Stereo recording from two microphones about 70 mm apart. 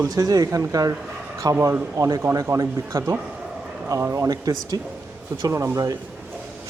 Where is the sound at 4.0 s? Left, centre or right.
Right.